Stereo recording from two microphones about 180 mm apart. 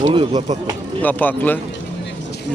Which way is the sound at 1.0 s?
10° left (ahead or behind).